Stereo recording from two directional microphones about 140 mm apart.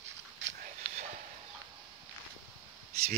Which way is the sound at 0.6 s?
55° right (ahead or behind).